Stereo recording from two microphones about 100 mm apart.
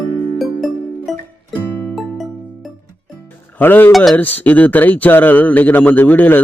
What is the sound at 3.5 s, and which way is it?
Music, 20° left (ahead or behind).